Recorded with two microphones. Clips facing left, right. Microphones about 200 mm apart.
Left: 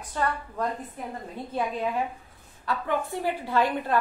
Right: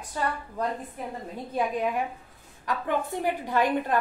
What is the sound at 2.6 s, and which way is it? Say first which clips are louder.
A woman's voice: even; 15° right (ahead or behind).